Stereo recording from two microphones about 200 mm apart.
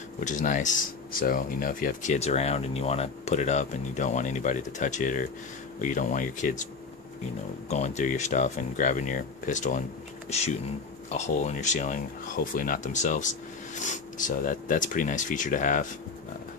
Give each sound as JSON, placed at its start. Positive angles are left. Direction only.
{"t": 0.2, "sound": "speech", "side_deg": 40}
{"t": 7.7, "sound": "speech", "side_deg": 35}